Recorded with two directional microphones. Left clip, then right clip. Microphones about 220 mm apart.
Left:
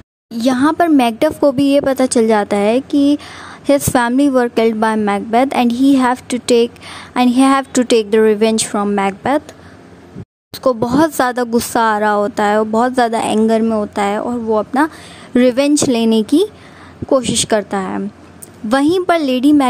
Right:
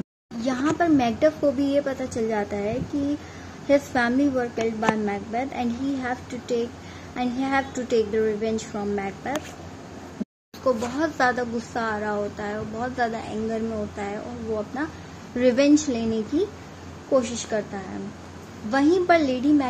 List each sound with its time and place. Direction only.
0.4 s speech: 40° left (ahead or behind)
10.6 s speech: 45° left (ahead or behind)